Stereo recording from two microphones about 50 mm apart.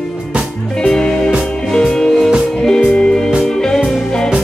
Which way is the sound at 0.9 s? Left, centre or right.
Centre.